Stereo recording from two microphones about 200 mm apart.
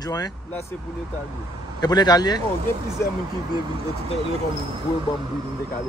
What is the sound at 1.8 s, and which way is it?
Speech, 20° left (ahead or behind).